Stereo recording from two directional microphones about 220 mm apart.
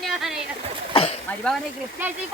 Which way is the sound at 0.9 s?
25° left (ahead or behind).